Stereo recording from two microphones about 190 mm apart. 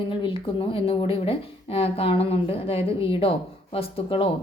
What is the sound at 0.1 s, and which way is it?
Speech, 25° left (ahead or behind).